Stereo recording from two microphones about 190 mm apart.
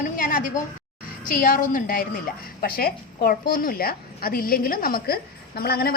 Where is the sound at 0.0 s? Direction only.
45° left (ahead or behind).